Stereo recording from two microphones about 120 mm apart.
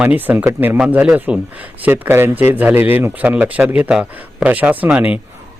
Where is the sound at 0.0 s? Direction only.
15° right (ahead or behind).